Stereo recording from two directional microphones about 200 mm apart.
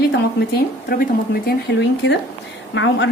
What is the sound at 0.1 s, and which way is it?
A woman's voice, 50° left (ahead or behind).